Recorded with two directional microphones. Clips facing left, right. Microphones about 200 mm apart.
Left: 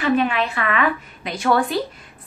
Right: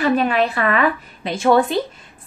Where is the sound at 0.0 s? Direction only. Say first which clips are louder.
Right 2 dB; 40° right (ahead or behind); by 1.8 s 25° right (ahead or behind).